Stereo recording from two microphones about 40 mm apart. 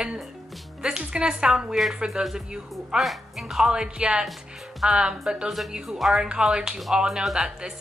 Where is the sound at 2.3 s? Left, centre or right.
Centre.